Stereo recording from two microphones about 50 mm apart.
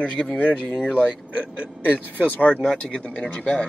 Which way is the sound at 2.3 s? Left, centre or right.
Left.